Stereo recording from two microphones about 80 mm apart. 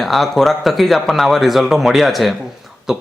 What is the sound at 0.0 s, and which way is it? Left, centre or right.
A man's voice, centre.